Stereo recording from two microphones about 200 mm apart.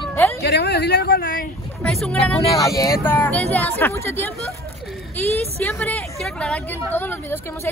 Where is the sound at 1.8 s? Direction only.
5° left (ahead or behind).